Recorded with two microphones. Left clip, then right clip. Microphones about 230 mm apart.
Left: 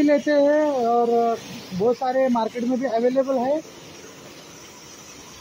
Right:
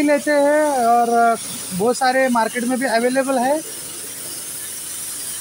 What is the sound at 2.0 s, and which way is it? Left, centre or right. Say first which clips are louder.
Speech: right 4 dB; centre.